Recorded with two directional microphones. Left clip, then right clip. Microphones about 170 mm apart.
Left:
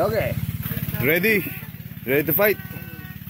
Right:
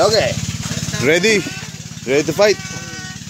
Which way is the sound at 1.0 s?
20° right (ahead or behind).